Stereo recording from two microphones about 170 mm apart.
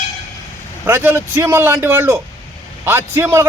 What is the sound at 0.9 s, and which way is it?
A man's voice, 15° right (ahead or behind).